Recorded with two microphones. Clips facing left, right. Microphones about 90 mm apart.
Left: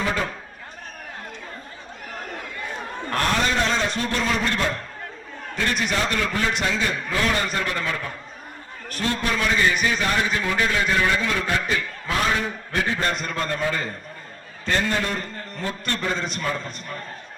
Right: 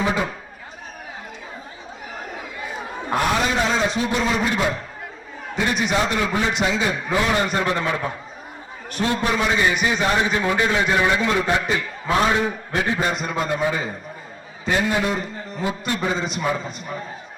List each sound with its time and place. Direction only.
0.0 s a man's voice: 10° right (ahead or behind)
2.1 s a man's voice: 5° right (ahead or behind)